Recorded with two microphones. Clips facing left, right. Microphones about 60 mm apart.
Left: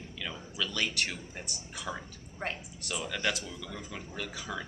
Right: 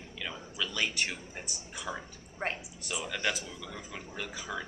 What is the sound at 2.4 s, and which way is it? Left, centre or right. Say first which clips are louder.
Speech: right 2 dB; centre.